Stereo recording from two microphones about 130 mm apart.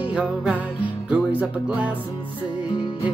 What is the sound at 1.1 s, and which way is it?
Speech, 10° right (ahead or behind).